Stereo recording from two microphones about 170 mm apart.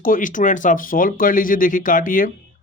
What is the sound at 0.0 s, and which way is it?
Speech, 50° left (ahead or behind).